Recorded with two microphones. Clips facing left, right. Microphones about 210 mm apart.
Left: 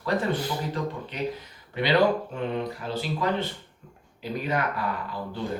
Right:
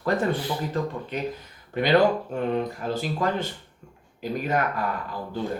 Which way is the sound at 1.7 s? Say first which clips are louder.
Right 2 dB; 45° right (ahead or behind).